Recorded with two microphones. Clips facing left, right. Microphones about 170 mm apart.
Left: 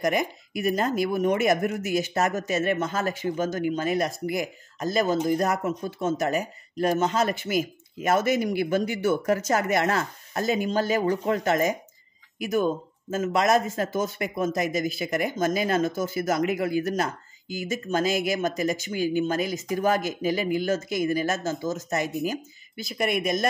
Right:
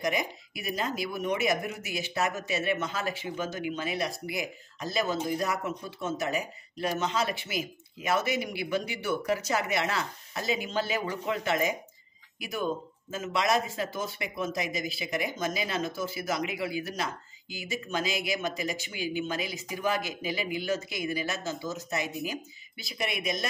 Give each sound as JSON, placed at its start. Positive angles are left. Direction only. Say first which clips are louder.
{"t": 0.0, "sound": "speech", "louder": "left 5 dB", "side_deg": 50}